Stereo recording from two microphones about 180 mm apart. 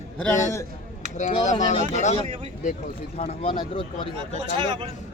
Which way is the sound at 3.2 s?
30° left (ahead or behind).